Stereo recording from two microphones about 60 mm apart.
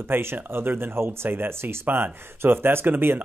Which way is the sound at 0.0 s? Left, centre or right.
Right.